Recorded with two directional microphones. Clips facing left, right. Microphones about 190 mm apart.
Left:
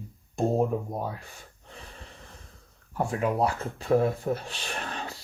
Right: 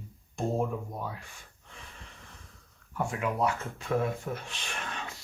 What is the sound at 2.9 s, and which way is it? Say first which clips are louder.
Speech: left 4 dB; 35° left (ahead or behind).